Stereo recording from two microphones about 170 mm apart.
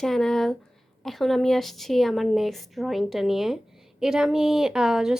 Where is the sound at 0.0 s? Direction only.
5° left (ahead or behind).